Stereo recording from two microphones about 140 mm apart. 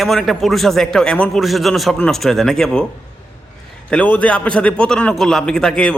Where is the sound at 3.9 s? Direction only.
10° left (ahead or behind).